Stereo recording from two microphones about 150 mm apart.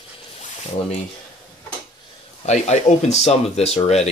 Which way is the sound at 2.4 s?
50° left (ahead or behind).